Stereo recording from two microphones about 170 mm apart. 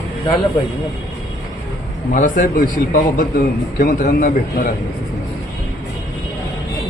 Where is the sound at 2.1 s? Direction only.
50° left (ahead or behind).